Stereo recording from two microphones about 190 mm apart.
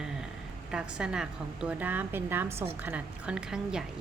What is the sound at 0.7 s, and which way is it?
A woman's voice, 5° right (ahead or behind).